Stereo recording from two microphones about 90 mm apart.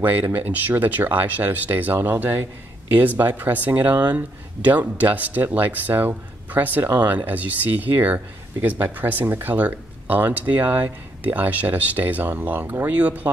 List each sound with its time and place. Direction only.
0.0 s speech: 20° right (ahead or behind)